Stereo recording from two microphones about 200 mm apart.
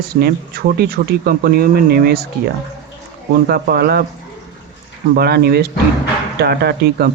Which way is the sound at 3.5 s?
50° right (ahead or behind).